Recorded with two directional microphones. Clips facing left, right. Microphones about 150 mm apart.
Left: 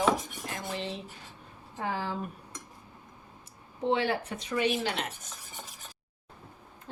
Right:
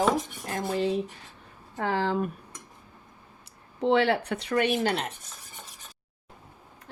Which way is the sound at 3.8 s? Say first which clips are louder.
Right 5 dB; 75° right (ahead or behind).